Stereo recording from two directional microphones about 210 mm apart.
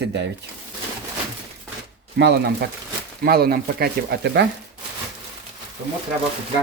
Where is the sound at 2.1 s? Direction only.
55° right (ahead or behind).